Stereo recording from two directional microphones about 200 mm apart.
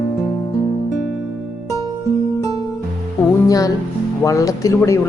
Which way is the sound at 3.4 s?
15° left (ahead or behind).